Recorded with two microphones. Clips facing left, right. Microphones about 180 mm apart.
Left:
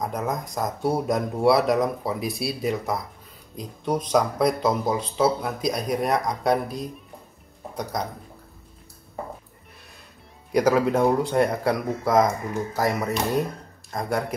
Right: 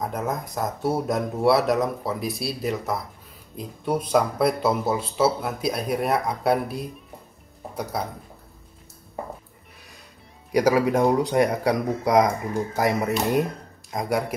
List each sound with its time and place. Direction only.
0.0 s speech: centre (ahead or behind)
10.5 s a man's voice: 10° right (ahead or behind)